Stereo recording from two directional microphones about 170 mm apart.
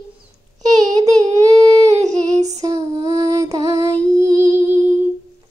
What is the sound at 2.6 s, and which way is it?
Female singing, 20° right (ahead or behind).